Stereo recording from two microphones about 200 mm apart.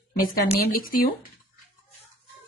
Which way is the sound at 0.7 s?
45° left (ahead or behind).